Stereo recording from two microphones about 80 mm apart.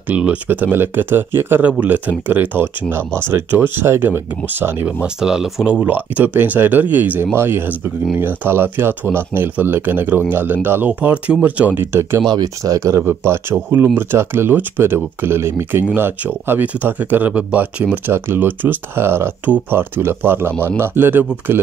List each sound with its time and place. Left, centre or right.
0.1 s speech: centre
5.0 s speech: centre; by 12.2 s right
12.3 s speech: right; by 17.8 s centre
18.0 s speech: right